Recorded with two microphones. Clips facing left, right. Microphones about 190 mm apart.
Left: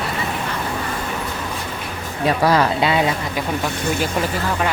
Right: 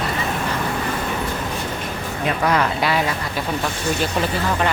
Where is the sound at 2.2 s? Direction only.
35° left (ahead or behind).